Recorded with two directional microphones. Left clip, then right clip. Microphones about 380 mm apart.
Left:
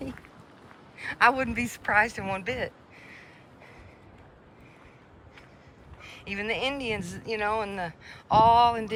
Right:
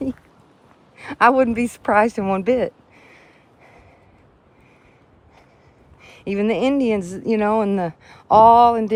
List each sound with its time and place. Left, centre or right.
0.9 s speech: centre
6.0 s speech: centre